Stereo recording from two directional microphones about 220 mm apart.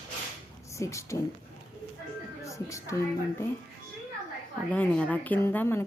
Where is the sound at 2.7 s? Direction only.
15° left (ahead or behind).